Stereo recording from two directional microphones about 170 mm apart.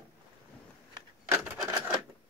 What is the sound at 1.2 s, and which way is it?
Rub, 15° right (ahead or behind).